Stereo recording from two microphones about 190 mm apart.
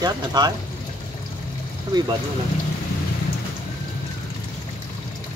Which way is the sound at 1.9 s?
20° right (ahead or behind).